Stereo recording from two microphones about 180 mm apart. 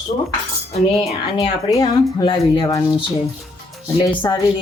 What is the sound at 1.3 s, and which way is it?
Speech, 20° left (ahead or behind).